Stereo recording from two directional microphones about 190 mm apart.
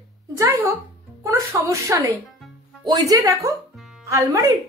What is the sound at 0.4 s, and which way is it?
A woman's voice, 15° right (ahead or behind).